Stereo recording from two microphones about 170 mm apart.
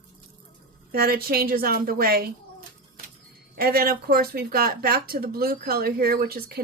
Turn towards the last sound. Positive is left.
turn(degrees=-65)  # may be behind; listen again after turning